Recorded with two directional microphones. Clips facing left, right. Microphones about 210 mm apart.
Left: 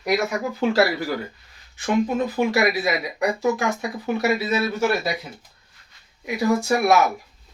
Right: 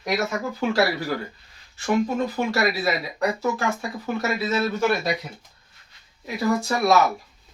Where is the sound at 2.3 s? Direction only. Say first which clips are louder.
Left 3 dB; 15° left (ahead or behind).